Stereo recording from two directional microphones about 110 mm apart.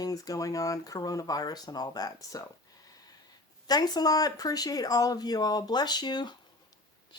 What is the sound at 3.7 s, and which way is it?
Speech, 35° left (ahead or behind).